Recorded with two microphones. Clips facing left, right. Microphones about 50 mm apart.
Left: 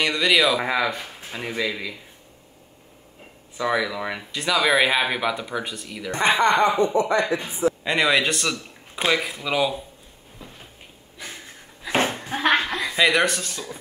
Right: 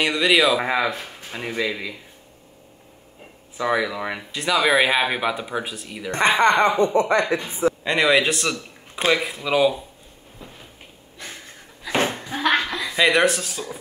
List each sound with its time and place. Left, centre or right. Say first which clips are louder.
0.0 s speech: right 1 dB; centre
3.5 s speech: right 1 dB; centre
6.1 s speech: right 2 dB; right
7.8 s speech: right 3 dB; centre
11.1 s a sound: even; centre
12.4 s a sound: even; left
12.9 s speech: right 2 dB; centre